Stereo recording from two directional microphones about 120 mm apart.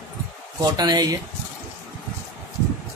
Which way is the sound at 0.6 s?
35° right (ahead or behind).